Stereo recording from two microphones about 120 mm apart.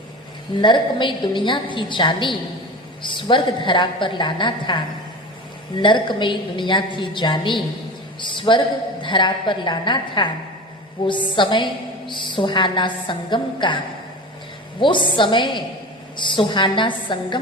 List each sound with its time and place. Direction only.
0.6 s a woman's voice: 40° left (ahead or behind)
5.8 s a woman's voice: 40° left (ahead or behind)